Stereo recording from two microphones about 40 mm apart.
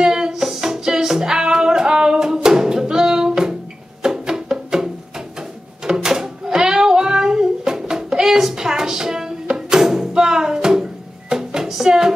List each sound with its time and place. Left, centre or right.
0.0 s music: centre
6.0 s child singing: centre